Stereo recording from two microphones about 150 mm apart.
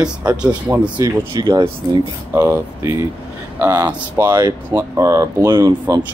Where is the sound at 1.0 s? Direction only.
30° right (ahead or behind).